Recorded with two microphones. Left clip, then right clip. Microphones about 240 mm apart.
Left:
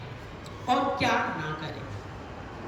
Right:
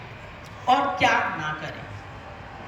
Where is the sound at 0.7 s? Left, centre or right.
Centre.